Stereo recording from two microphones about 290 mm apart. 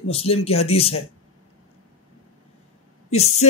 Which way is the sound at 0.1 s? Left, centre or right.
Centre.